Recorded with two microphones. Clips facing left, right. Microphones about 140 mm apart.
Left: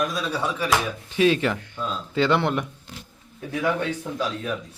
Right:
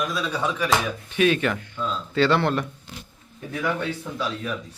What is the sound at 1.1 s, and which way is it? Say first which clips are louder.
Speech: left 1 dB; 30° left (ahead or behind).